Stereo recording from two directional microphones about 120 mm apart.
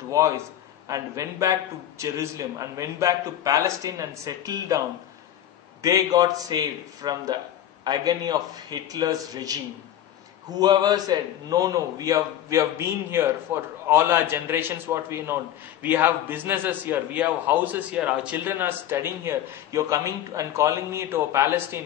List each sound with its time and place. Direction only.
0.1 s a man's voice: 25° right (ahead or behind)
10.6 s a man's voice: 35° right (ahead or behind)